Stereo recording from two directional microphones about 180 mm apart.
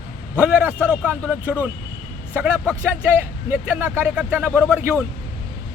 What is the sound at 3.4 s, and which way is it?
Speech, 10° right (ahead or behind).